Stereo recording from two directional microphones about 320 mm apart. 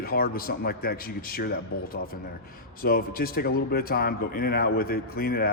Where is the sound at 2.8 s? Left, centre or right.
Left.